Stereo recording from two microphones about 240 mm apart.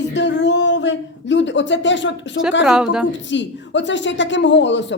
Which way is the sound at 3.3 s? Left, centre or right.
Left.